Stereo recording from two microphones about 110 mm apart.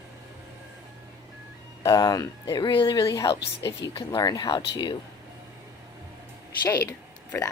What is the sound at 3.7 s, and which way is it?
Speech, 50° left (ahead or behind).